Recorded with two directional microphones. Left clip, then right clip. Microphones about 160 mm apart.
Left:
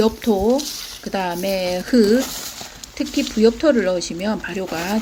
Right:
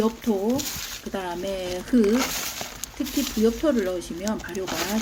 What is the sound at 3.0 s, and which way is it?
Speech, 20° left (ahead or behind).